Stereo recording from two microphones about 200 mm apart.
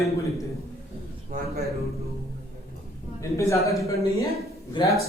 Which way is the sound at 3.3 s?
15° left (ahead or behind).